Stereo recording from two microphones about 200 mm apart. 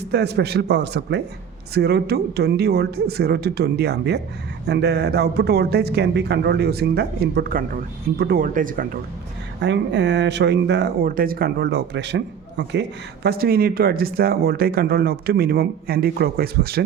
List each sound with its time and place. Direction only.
0.1 s speech: 55° right (ahead or behind)
9.6 s speech: 60° right (ahead or behind)